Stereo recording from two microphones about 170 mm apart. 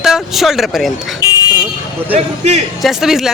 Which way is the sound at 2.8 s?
Centre (ahead or behind).